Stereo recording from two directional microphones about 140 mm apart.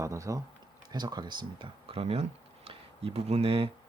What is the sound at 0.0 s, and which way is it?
Speech, 20° right (ahead or behind).